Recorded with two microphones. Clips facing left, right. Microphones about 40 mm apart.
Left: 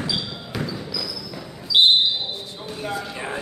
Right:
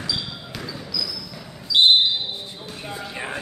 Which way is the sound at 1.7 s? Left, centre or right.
Left.